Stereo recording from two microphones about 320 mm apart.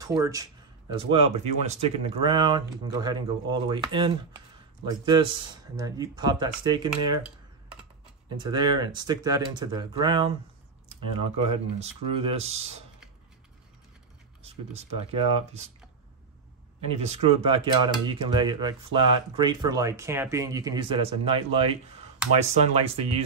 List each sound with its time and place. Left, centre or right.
0.0 s speech: centre
8.4 s speech: centre
11.8 s speech: centre
14.7 s speech: centre
16.9 s speech: centre